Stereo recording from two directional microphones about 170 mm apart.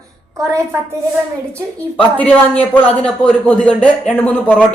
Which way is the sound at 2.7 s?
10° left (ahead or behind).